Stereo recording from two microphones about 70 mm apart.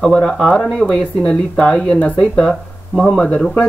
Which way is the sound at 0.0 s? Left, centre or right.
Centre.